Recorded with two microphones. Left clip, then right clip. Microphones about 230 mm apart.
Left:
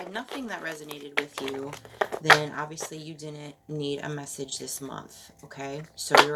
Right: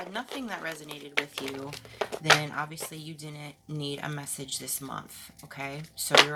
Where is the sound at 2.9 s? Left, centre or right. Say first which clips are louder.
Left 3 dB; right.